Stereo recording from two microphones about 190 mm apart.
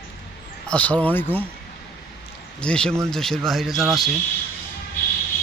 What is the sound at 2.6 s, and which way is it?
Speech, 5° left (ahead or behind).